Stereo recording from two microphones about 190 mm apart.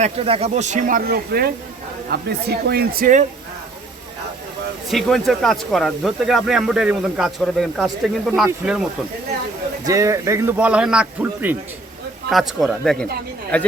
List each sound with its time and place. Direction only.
0.0 s speech: 30° right (ahead or behind)
4.9 s speech: centre (ahead or behind)
9.8 s a man's voice: 15° right (ahead or behind); by 13.7 s 10° left (ahead or behind)